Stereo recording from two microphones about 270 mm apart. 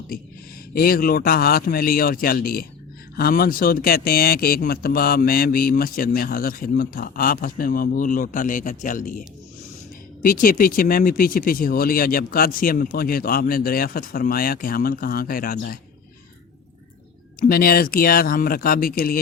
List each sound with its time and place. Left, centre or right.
0.7 s speech: left
10.2 s speech: left
17.4 s speech: left